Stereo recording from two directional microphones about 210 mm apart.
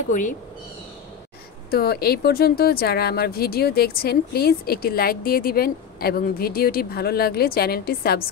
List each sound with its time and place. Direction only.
0.1 s speech: 40° left (ahead or behind)
1.7 s speech: 50° left (ahead or behind)